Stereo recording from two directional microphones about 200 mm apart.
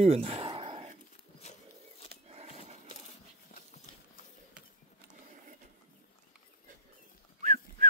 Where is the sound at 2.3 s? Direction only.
30° right (ahead or behind).